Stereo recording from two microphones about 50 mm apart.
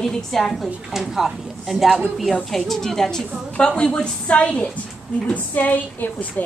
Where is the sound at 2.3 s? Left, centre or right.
Centre; by 4.7 s left.